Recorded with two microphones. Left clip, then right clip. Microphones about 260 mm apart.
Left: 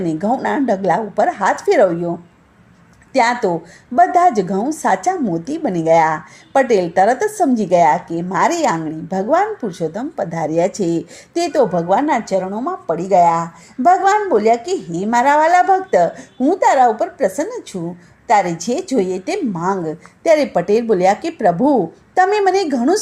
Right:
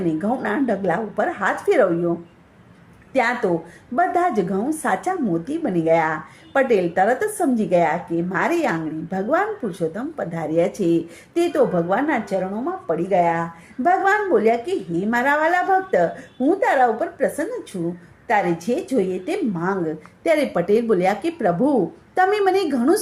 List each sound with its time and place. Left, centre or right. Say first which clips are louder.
0.2 s a woman's voice: left 5 dB; left
3.1 s a woman's voice: left 5 dB; left